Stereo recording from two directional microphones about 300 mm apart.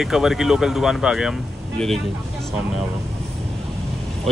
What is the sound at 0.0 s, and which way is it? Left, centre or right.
Speech, centre.